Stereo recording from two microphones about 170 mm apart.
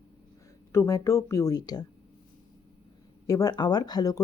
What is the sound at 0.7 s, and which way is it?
Speech, 20° left (ahead or behind).